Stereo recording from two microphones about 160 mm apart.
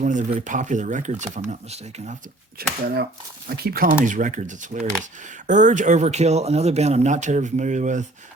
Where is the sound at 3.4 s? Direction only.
75° right (ahead or behind).